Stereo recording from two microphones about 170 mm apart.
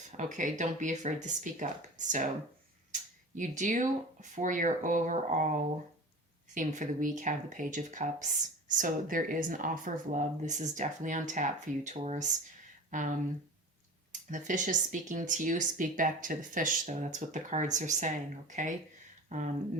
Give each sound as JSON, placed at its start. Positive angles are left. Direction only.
{"t": 0.2, "sound": "speech", "side_deg": -50}
{"t": 6.5, "sound": "speech", "side_deg": -50}